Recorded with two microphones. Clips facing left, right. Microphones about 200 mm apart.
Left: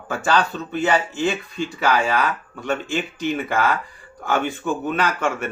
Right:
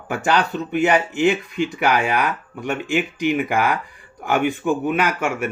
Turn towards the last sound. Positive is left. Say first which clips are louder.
# right 1 dB
turn(degrees=-10)  # may be behind; listen again after turning